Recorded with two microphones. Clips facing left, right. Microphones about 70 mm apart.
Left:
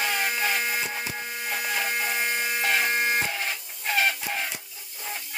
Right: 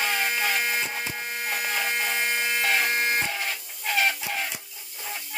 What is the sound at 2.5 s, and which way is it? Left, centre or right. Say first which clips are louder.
Buzzer: even; centre.